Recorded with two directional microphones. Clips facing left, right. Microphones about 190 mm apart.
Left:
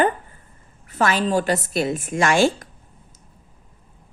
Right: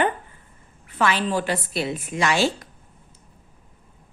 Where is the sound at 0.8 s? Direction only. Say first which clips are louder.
Left 2 dB; 40° left (ahead or behind).